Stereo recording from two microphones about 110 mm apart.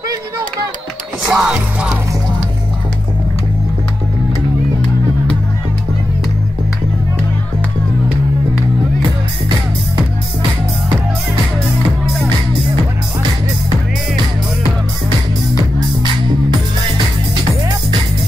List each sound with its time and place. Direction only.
1.3 s music: 5° right (ahead or behind)
15.5 s music: 40° right (ahead or behind)